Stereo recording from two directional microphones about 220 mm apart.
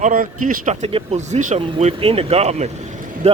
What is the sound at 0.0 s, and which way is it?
Speech, 35° right (ahead or behind).